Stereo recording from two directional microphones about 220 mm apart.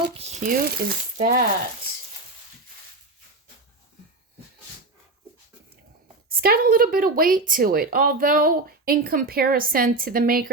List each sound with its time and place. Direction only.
0.2 s speech: 30° right (ahead or behind)
6.3 s speech: 45° right (ahead or behind)